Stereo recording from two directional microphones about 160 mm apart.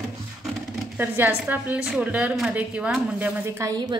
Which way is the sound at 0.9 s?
15° right (ahead or behind).